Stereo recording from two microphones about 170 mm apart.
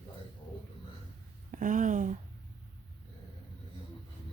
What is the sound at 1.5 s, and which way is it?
Speech, 50° right (ahead or behind).